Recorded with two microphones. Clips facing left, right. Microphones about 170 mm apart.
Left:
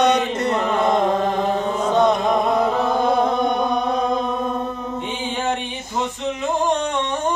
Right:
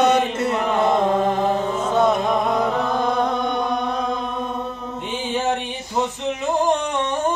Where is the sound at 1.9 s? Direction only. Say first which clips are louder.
Left 1 dB; 5° right (ahead or behind).